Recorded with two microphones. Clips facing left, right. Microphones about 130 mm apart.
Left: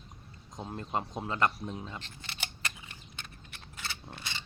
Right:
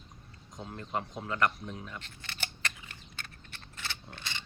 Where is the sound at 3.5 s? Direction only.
10° left (ahead or behind).